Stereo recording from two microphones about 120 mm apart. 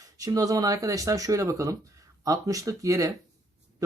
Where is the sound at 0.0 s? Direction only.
30° right (ahead or behind).